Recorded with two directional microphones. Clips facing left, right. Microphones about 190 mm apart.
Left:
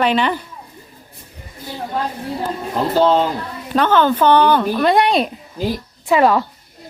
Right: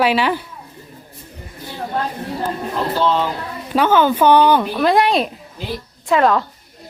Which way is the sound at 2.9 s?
45° left (ahead or behind).